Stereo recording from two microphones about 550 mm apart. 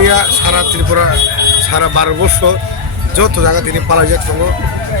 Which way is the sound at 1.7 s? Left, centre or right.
Right.